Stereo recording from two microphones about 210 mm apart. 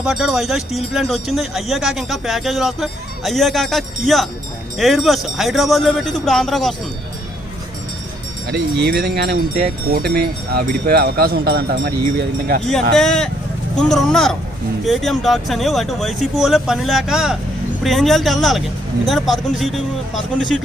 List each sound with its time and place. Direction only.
0.0 s speech: centre (ahead or behind)
8.4 s speech: 50° right (ahead or behind)
13.0 s speech: 5° left (ahead or behind)